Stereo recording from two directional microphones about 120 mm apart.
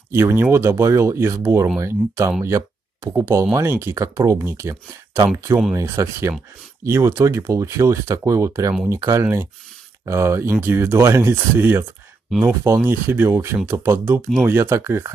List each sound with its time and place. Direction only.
0.1 s speech: 20° right (ahead or behind)